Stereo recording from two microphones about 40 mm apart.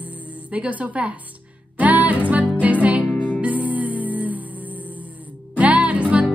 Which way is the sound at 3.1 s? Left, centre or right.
Left.